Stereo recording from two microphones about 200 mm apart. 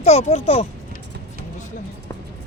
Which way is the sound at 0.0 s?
30° left (ahead or behind).